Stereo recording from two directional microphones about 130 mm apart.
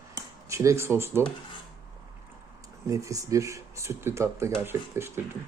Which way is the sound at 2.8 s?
25° right (ahead or behind).